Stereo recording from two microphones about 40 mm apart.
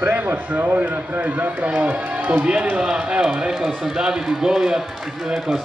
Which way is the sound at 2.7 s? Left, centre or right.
Right.